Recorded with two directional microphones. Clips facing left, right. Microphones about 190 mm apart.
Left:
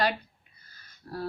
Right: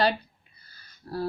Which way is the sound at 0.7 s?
30° right (ahead or behind).